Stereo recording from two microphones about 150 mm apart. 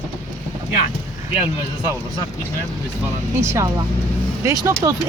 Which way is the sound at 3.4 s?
20° right (ahead or behind).